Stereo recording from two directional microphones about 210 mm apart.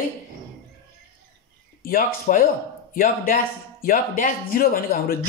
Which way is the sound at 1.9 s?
40° left (ahead or behind).